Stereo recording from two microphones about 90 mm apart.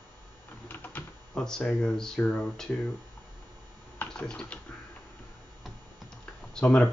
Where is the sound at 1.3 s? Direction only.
10° left (ahead or behind).